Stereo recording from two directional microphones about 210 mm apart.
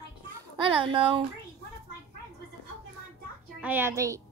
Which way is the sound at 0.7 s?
25° right (ahead or behind).